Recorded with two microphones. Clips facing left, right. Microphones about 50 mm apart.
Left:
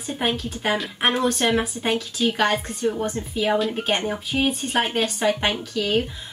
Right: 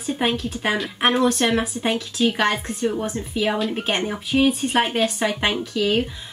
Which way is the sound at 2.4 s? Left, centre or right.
Right.